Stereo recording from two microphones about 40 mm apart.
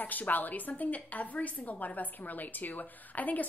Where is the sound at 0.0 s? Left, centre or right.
Left.